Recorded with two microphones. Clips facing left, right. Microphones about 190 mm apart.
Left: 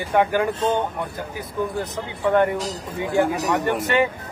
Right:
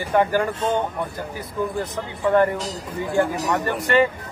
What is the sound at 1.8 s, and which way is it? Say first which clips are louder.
Speech: even; 15° left (ahead or behind).